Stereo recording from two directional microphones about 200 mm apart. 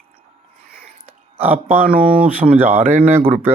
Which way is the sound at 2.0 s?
5° right (ahead or behind).